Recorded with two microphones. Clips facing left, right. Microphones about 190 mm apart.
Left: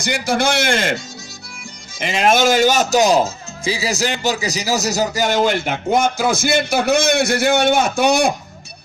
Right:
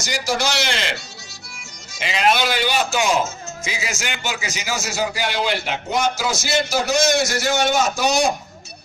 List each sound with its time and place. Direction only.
0.0 s speech: 55° left (ahead or behind)